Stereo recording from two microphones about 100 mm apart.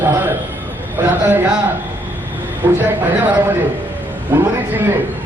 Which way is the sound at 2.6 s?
20° right (ahead or behind).